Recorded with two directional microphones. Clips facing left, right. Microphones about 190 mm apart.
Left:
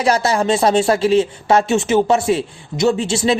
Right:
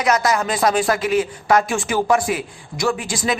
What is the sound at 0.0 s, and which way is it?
Speech, 30° left (ahead or behind).